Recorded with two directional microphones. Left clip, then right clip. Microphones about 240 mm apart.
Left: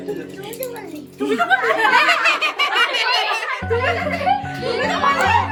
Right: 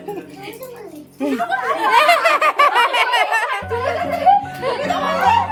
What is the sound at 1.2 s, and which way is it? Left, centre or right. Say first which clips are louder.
Speech: left 3 dB; centre.